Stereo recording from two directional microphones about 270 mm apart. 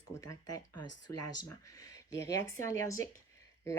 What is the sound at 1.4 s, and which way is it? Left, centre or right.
Speech, centre.